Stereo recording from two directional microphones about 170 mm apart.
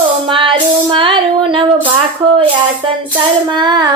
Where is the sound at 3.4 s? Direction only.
25° right (ahead or behind).